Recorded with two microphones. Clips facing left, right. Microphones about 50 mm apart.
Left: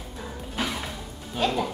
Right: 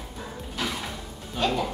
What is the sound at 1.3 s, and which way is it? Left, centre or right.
Speech, centre.